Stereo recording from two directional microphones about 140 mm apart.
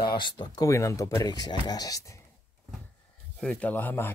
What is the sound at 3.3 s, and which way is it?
Speech, 10° left (ahead or behind).